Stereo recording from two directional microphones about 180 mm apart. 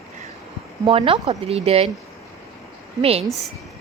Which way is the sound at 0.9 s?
30° right (ahead or behind).